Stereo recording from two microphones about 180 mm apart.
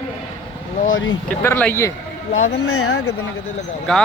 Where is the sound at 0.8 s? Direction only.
90° left.